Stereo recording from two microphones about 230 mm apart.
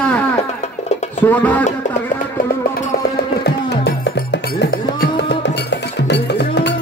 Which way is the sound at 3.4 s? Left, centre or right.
Left.